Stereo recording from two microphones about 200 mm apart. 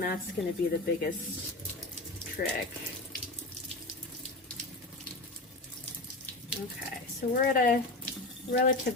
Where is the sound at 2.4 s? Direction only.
45° left (ahead or behind).